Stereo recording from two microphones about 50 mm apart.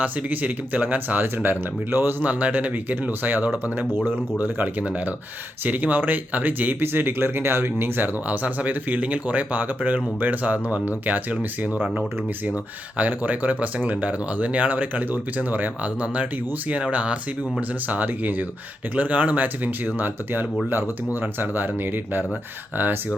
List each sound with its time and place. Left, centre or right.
0.0 s speech: right
2.2 s speech: right
8.3 s speech: right